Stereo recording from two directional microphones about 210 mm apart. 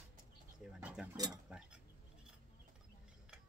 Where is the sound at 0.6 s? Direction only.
5° right (ahead or behind).